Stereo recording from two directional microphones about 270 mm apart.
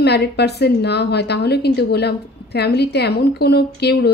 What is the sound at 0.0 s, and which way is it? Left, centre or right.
A woman's voice, left.